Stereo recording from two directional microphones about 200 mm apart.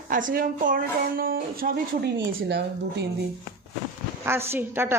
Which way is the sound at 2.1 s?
60° right (ahead or behind).